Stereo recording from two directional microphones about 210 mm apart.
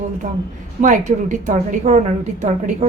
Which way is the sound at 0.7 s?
35° right (ahead or behind).